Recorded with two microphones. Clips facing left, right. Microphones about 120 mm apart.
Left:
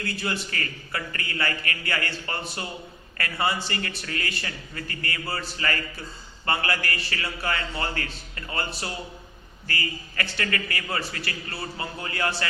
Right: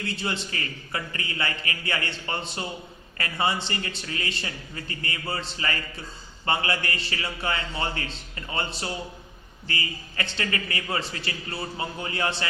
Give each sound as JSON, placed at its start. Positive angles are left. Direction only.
{"t": 0.0, "sound": "a man's voice", "side_deg": -20}